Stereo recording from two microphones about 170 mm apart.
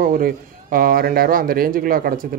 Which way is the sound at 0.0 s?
55° right (ahead or behind).